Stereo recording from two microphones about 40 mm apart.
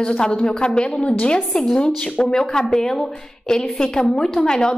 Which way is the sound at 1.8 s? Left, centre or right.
Left.